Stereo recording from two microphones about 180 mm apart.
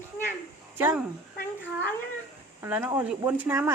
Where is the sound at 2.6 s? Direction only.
10° right (ahead or behind).